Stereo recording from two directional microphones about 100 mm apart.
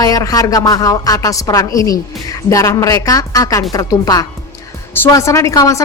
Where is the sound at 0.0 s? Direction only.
35° left (ahead or behind).